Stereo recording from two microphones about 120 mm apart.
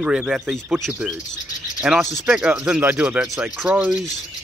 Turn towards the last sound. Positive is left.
turn(degrees=-5)  # may be behind; listen again after turning